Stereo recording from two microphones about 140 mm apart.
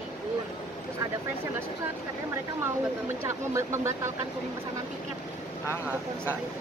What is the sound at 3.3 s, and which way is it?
Speech, 20° right (ahead or behind).